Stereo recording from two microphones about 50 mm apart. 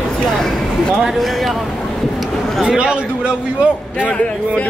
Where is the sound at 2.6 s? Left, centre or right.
Centre.